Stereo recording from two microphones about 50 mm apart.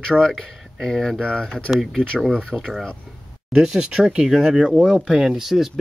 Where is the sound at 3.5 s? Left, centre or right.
Centre.